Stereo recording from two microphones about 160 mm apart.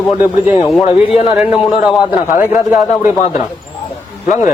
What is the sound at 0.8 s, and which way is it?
Speech, 35° left (ahead or behind).